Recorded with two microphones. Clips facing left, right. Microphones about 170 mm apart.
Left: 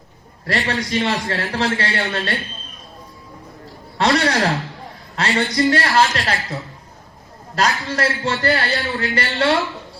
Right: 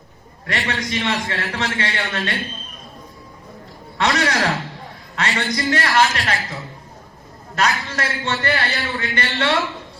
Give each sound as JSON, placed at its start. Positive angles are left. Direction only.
{"t": 0.4, "sound": "a man's voice", "side_deg": 35}
{"t": 3.9, "sound": "a man's voice", "side_deg": 30}